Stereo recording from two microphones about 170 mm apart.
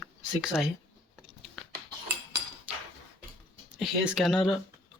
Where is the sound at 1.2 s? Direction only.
Centre (ahead or behind).